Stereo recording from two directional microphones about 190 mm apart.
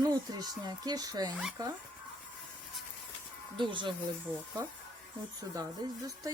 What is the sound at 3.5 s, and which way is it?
Speech, 25° right (ahead or behind).